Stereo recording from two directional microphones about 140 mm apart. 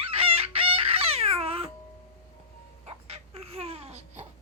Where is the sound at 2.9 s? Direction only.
45° right (ahead or behind).